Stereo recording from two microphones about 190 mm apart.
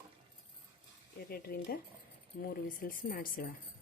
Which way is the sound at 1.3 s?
50° left (ahead or behind).